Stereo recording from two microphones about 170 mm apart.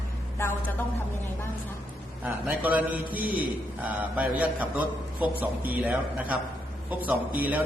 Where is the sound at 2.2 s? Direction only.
10° right (ahead or behind).